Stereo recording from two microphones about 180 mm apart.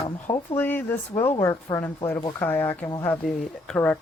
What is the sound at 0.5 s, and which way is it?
Speech, 10° left (ahead or behind).